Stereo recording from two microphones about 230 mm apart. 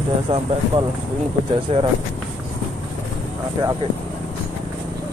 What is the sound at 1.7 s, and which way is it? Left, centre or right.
Speech, right.